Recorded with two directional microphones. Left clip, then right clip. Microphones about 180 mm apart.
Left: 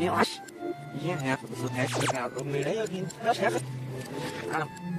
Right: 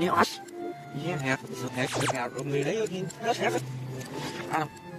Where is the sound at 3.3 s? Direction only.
15° left (ahead or behind).